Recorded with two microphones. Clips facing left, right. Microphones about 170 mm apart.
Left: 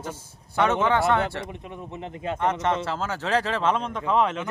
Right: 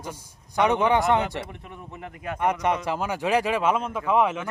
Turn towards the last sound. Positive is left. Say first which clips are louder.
# right 1 dB
turn(degrees=-10)  # may be behind; listen again after turning